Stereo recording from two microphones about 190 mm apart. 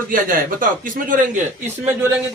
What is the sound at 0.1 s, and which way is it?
A man's voice, 45° right (ahead or behind).